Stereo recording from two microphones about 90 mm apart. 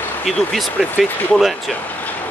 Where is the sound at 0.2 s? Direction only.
5° left (ahead or behind).